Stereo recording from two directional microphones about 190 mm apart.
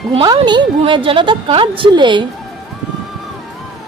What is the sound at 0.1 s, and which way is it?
Speech, 25° right (ahead or behind).